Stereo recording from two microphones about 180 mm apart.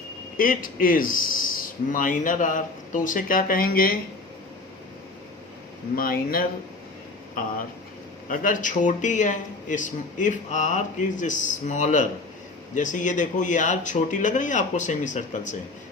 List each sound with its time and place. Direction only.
0.3 s speech: 50° left (ahead or behind)
6.0 s speech: 55° left (ahead or behind)
8.3 s speech: 50° left (ahead or behind)